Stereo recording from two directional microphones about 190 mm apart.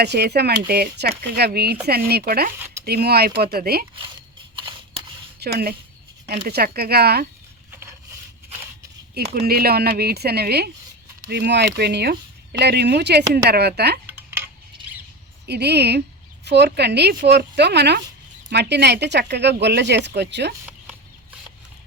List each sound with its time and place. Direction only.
0.0 s speech: 60° right (ahead or behind)
4.5 s camera: 25° right (ahead or behind)
5.4 s speech: 55° right (ahead or behind)
9.1 s speech: 55° right (ahead or behind)
15.4 s speech: 60° right (ahead or behind)